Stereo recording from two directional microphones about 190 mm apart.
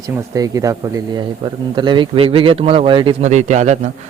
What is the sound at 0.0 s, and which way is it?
Speech, 20° right (ahead or behind).